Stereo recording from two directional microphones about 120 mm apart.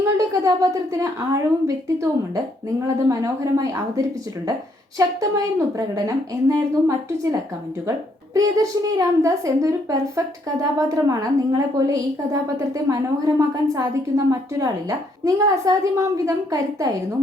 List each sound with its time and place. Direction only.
0.0 s a woman's voice: 25° right (ahead or behind)